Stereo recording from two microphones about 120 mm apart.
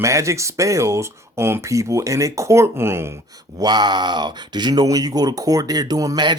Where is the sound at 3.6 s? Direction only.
35° right (ahead or behind).